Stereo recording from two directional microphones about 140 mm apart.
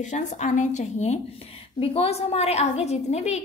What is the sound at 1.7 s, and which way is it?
A woman's voice, 45° left (ahead or behind).